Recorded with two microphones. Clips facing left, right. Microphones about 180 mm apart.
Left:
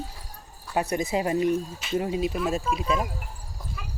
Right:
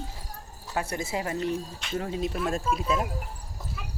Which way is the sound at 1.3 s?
5° left (ahead or behind).